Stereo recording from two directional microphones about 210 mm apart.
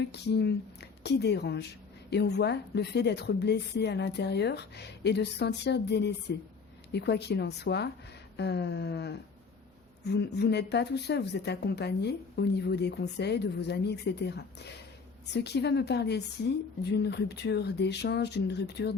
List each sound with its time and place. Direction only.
0.0 s speech: 50° left (ahead or behind)